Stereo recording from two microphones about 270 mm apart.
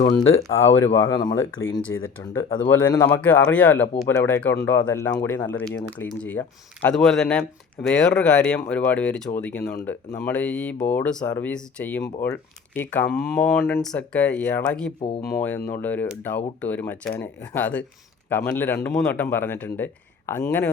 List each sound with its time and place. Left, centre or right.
0.9 s speech: centre
1.6 s speech: left
2.2 s speech: centre